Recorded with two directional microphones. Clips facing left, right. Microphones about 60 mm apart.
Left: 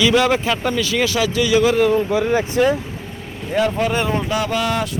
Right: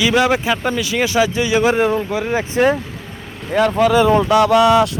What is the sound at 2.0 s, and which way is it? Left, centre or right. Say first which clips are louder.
Speech: left 2 dB; centre.